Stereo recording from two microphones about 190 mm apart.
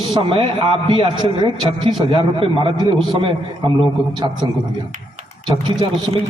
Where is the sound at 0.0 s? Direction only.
25° right (ahead or behind).